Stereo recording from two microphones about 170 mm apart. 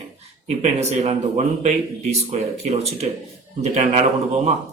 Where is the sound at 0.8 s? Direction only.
40° right (ahead or behind).